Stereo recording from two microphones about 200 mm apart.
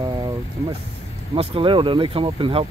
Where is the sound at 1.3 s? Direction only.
30° right (ahead or behind).